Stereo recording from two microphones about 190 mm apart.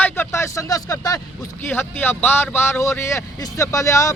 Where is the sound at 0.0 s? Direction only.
10° left (ahead or behind).